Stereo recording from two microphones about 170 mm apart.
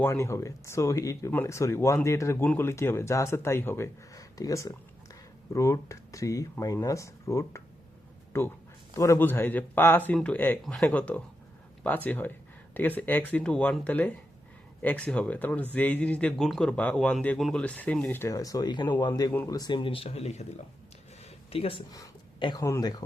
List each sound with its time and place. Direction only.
0.0 s speech: 15° left (ahead or behind); by 20.5 s 40° left (ahead or behind)
21.5 s speech: 35° left (ahead or behind)
21.9 s speech: 25° left (ahead or behind)